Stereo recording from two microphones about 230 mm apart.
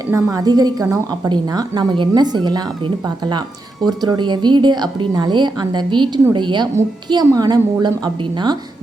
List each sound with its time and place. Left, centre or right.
0.1 s a woman's voice: centre